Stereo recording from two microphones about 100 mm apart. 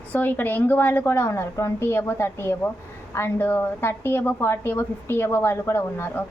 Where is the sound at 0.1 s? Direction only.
20° left (ahead or behind).